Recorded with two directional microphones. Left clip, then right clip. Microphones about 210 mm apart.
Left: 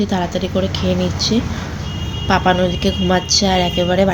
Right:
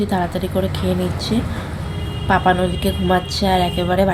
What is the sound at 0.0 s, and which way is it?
A woman's voice, 5° left (ahead or behind).